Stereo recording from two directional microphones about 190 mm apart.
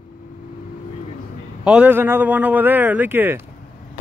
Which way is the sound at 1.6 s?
5° right (ahead or behind).